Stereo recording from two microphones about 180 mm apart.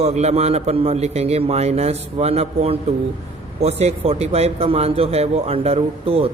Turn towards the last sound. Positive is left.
turn(degrees=-35)  # may be behind; listen again after turning